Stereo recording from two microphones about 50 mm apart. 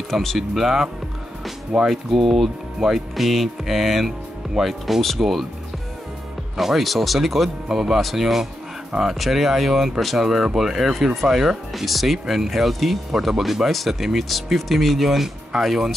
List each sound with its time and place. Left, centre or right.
0.1 s speech: centre
1.9 s speech: centre
6.5 s speech: centre